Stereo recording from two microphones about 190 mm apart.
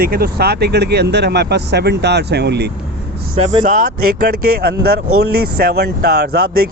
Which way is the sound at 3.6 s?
45° right (ahead or behind).